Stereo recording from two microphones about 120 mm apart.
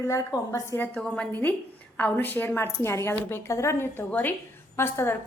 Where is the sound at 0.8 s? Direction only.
10° left (ahead or behind).